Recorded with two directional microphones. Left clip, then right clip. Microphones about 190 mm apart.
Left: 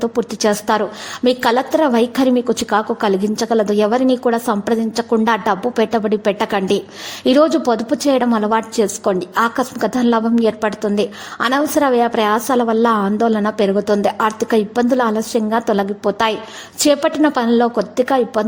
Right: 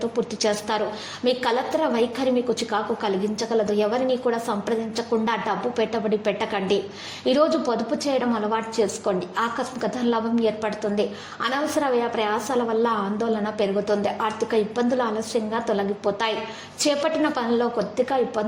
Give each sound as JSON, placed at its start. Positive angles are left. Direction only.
{"t": 0.0, "sound": "a woman's voice", "side_deg": 45}